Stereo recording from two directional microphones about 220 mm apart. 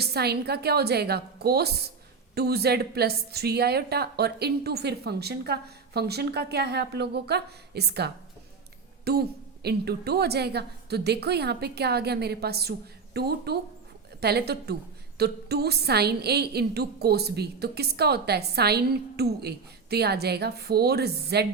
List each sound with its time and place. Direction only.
0.0 s a woman's voice: 45° right (ahead or behind)